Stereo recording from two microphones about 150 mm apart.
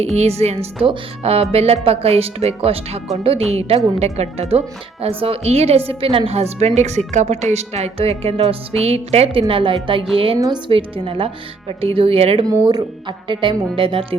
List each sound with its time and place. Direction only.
0.0 s a woman's voice: 45° right (ahead or behind)
10.3 s a woman's voice: 25° right (ahead or behind)
10.7 s speech: 35° right (ahead or behind)
12.5 s speech: 25° right (ahead or behind)